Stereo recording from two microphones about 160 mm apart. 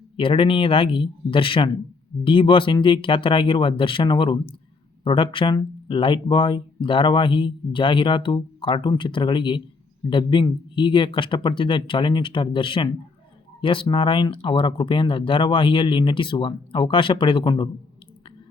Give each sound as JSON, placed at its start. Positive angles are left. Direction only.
{"t": 0.2, "sound": "speech", "side_deg": 35}